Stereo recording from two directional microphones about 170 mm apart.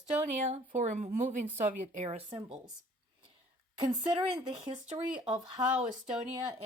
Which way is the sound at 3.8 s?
30° right (ahead or behind).